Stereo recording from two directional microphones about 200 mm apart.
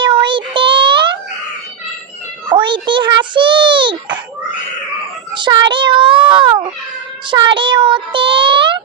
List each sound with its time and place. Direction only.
0.0 s child singing: 25° right (ahead or behind)
2.5 s a child's voice: 25° right (ahead or behind)
5.3 s child singing: 25° right (ahead or behind)